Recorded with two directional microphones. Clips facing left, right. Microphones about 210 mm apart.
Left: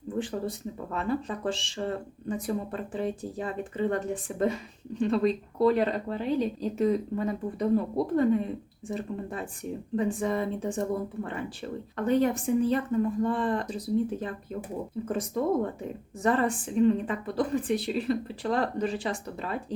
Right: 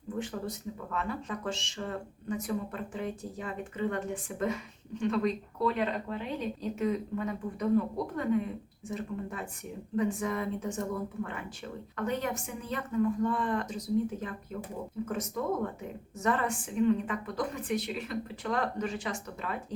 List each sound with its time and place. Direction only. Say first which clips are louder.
0.2 s speech: left 5 dB; 30° left (ahead or behind)
16.2 s speech: left 5 dB; 35° left (ahead or behind)